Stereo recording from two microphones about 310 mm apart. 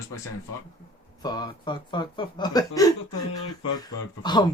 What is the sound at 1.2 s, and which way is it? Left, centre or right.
Speech, centre.